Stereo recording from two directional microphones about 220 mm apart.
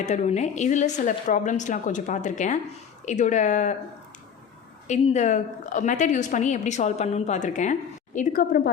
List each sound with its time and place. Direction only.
0.0 s a woman's voice: 30° left (ahead or behind)
4.9 s a woman's voice: 30° left (ahead or behind)